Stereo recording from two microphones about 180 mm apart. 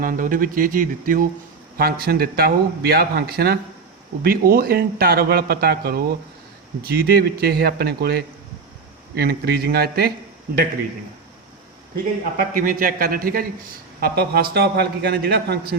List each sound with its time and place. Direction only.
0.0 s speech: 50° right (ahead or behind)
12.4 s speech: 50° right (ahead or behind)